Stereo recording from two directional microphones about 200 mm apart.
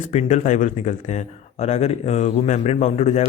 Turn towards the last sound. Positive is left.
turn(degrees=35)  # may be behind; listen again after turning